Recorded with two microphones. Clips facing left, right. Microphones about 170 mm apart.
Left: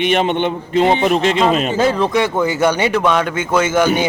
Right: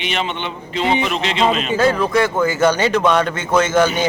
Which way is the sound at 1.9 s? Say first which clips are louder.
Left 1 dB; 20° left (ahead or behind).